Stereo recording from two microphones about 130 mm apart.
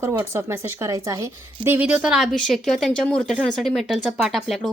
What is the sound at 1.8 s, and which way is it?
A woman's voice, 10° right (ahead or behind).